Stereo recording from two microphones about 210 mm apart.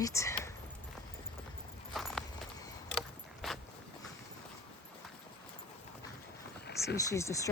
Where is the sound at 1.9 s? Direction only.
Centre (ahead or behind).